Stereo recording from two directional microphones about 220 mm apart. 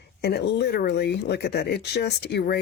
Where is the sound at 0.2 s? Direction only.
50° left (ahead or behind).